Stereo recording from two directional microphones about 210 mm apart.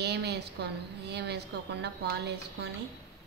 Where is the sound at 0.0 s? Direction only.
50° right (ahead or behind).